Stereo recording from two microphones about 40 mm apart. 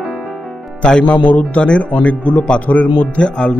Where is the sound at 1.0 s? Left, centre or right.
Left.